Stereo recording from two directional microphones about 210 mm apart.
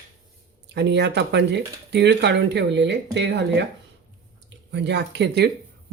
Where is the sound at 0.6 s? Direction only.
55° right (ahead or behind).